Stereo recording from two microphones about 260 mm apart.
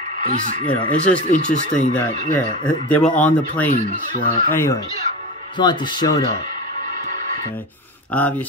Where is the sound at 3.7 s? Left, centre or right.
Left.